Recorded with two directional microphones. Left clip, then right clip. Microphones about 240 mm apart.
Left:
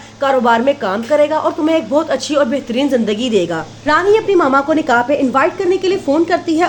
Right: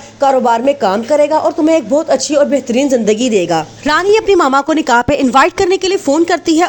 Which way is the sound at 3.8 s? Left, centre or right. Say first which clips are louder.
Right 1 dB; right.